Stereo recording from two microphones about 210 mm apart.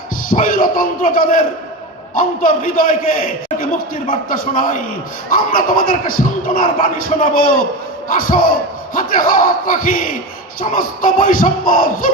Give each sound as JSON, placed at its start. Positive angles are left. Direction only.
{"t": 0.3, "sound": "speech", "side_deg": 40}
{"t": 9.0, "sound": "speech", "side_deg": 40}